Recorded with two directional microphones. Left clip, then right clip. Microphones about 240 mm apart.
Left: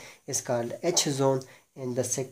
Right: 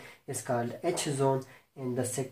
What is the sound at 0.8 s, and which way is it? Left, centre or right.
Speech, left.